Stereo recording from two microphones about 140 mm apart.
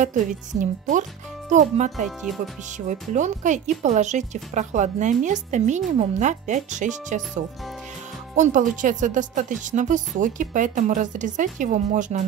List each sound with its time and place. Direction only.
0.0 s speech: 60° right (ahead or behind)
2.0 s speech: centre (ahead or behind)
2.9 s speech: 60° right (ahead or behind)
8.4 s speech: 65° right (ahead or behind)